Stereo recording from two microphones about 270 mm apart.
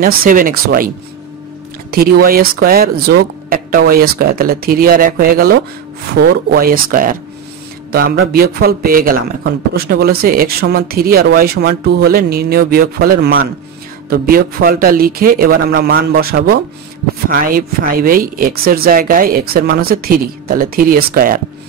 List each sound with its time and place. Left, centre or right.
0.0 s speech: right